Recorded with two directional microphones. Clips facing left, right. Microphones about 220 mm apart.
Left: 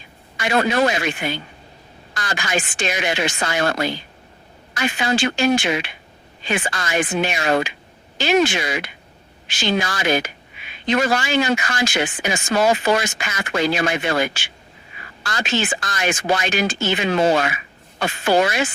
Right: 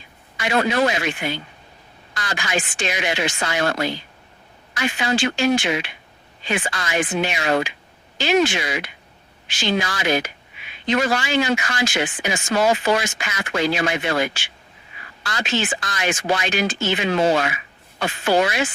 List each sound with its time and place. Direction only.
0.3 s speech: 45° left (ahead or behind)
2.1 s speech: 45° left (ahead or behind)
4.7 s speech: 45° left (ahead or behind)